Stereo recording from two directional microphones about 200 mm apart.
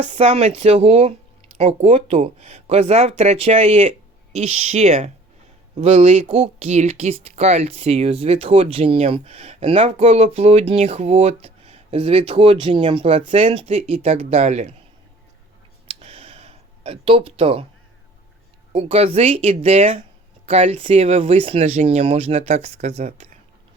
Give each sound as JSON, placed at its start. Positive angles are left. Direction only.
{"t": 0.0, "sound": "speech", "side_deg": -35}
{"t": 16.0, "sound": "a sound", "side_deg": -30}
{"t": 18.7, "sound": "speech", "side_deg": -30}